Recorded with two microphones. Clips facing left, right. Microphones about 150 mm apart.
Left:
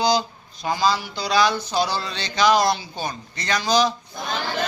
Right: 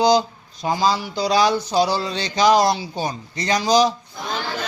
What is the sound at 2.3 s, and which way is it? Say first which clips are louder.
A man's voice: right 2 dB; 40° right (ahead or behind).